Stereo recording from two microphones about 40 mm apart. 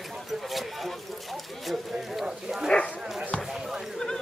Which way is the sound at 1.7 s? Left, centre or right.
Centre.